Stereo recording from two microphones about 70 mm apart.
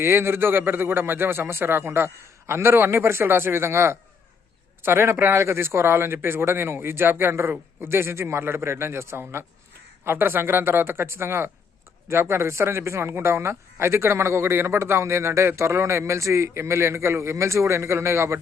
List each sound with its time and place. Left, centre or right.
0.0 s speech: right